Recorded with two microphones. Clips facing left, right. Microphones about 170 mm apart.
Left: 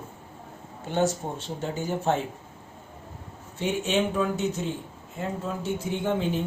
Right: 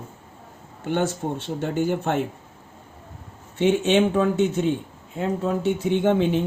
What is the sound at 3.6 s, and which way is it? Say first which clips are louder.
Speech: right 7 dB; 70° right (ahead or behind).